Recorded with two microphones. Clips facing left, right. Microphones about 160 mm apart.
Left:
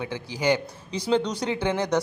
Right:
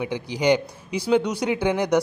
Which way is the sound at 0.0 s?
15° right (ahead or behind).